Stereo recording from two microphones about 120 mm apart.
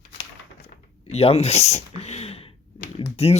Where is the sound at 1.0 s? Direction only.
60° left (ahead or behind).